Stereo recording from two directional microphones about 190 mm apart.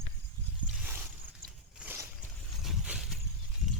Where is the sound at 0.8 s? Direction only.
10° right (ahead or behind).